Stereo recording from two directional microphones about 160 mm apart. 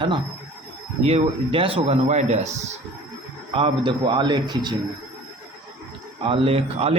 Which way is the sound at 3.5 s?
35° right (ahead or behind).